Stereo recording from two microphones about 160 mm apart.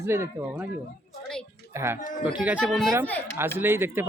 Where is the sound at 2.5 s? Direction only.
Centre (ahead or behind).